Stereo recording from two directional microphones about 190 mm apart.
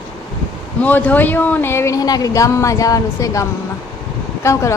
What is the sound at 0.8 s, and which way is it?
Speech, 10° left (ahead or behind).